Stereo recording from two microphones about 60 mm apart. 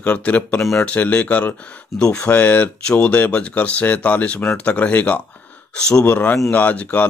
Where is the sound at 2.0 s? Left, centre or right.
Centre.